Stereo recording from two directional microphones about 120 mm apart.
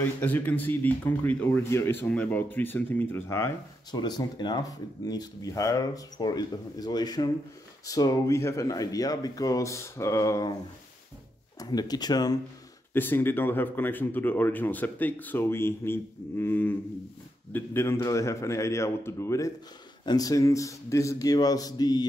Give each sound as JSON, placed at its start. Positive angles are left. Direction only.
{"t": 0.0, "sound": "speech", "side_deg": 15}
{"t": 3.9, "sound": "speech", "side_deg": 35}
{"t": 11.6, "sound": "speech", "side_deg": 35}
{"t": 12.9, "sound": "speech", "side_deg": 15}